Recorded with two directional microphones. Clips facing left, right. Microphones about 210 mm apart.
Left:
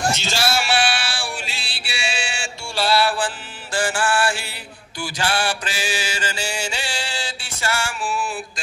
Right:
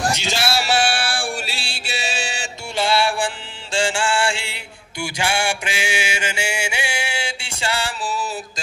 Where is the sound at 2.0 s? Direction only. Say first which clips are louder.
Left 1 dB; 40° right (ahead or behind).